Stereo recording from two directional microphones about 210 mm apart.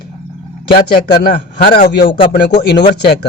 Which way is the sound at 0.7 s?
50° left (ahead or behind).